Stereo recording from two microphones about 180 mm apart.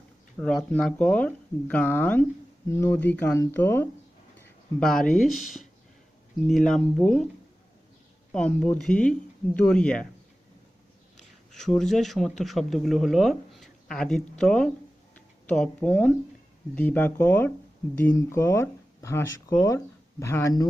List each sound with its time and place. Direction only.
0.3 s speech: 5° left (ahead or behind)
8.3 s speech: 5° left (ahead or behind)
11.5 s speech: 5° left (ahead or behind); by 20.7 s 20° left (ahead or behind)